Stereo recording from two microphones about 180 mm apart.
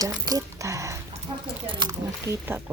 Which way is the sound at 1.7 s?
25° right (ahead or behind).